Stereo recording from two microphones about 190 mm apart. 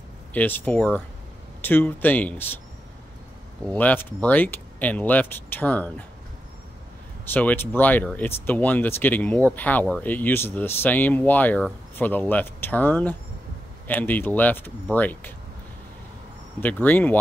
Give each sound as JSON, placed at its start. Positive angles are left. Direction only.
{"t": 0.3, "sound": "speech", "side_deg": 10}
{"t": 3.6, "sound": "speech", "side_deg": 10}
{"t": 7.3, "sound": "speech", "side_deg": 10}
{"t": 16.6, "sound": "speech", "side_deg": 10}